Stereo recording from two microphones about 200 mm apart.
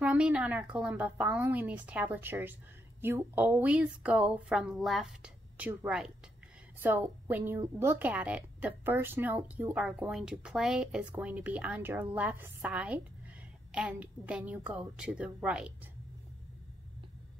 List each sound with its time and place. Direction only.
0.0 s a woman's voice: 5° right (ahead or behind)